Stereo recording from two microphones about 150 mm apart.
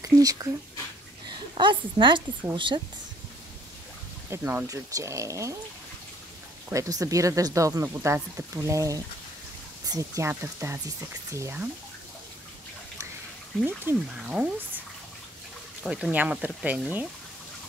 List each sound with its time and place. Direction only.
0.0 s speech: 25° right (ahead or behind)
1.6 s a woman's voice: 30° right (ahead or behind)
4.3 s speech: 15° right (ahead or behind)
6.7 s speech: 25° right (ahead or behind)
13.7 s speech: 10° right (ahead or behind)
15.8 s speech: 5° right (ahead or behind)